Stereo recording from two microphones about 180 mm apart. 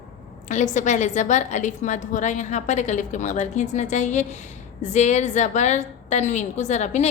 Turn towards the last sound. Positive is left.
turn(degrees=40)  # may be behind; listen again after turning